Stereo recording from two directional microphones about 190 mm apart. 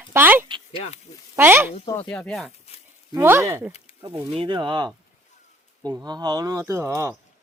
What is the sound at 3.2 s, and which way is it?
Speech, 10° right (ahead or behind).